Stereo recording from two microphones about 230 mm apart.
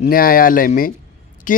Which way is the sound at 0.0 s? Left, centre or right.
Left.